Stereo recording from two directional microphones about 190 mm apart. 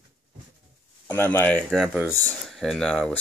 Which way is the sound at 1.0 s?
10° left (ahead or behind).